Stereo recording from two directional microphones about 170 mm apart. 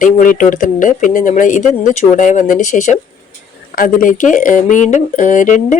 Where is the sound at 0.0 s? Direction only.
50° left (ahead or behind).